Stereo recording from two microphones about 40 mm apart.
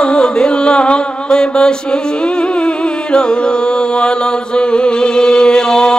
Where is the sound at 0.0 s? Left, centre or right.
Left.